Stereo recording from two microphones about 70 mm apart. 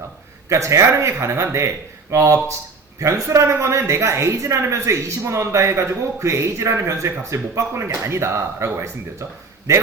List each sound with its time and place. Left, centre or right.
0.4 s a woman's voice: right